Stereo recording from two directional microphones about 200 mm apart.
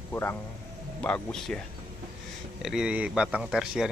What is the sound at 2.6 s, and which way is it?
A man's voice, 5° right (ahead or behind).